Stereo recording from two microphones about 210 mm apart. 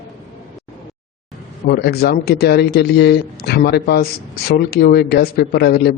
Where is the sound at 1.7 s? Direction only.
50° left (ahead or behind).